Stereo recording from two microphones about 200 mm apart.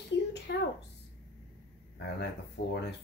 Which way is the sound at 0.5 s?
55° left (ahead or behind).